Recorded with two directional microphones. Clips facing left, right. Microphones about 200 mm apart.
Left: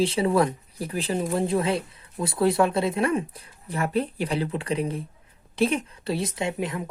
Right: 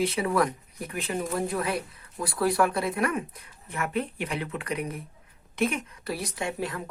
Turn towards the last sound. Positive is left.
turn(degrees=20)  # may be behind; listen again after turning